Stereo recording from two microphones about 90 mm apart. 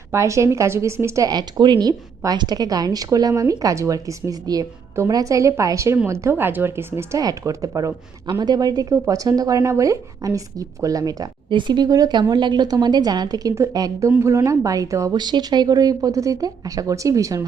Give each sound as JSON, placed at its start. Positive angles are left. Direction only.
{"t": 0.1, "sound": "a woman's voice", "side_deg": -35}
{"t": 1.3, "sound": "a woman's voice", "side_deg": -55}
{"t": 7.2, "sound": "a woman's voice", "side_deg": -40}
{"t": 8.3, "sound": "a woman's voice", "side_deg": -50}
{"t": 11.4, "sound": "a woman's voice", "side_deg": -60}
{"t": 15.1, "sound": "a woman's voice", "side_deg": -50}